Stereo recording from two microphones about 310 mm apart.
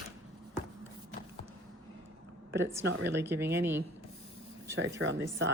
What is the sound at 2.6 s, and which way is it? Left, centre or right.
Speech, right.